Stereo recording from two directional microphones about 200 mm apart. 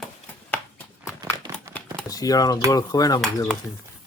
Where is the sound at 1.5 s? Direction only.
15° right (ahead or behind).